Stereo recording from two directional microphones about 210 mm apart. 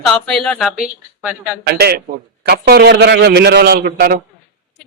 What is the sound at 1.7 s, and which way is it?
A man's voice, 50° right (ahead or behind).